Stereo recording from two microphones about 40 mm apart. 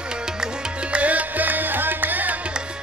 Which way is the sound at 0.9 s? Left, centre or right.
Right.